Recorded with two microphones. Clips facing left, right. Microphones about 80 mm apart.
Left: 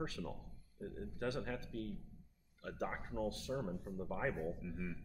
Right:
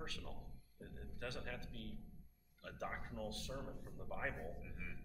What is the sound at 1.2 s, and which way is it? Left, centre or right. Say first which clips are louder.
Speech: left 7 dB; left.